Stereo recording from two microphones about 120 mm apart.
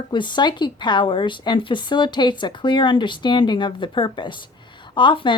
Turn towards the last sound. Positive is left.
turn(degrees=40)  # may be behind; listen again after turning